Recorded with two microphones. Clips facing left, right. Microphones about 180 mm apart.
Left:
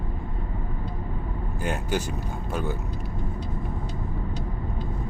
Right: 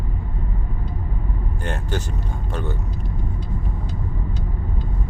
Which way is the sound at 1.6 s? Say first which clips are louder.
Left 1 dB; 10° left (ahead or behind).